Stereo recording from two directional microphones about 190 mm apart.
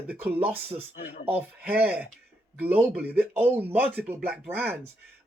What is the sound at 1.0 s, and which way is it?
Speech, 45° left (ahead or behind).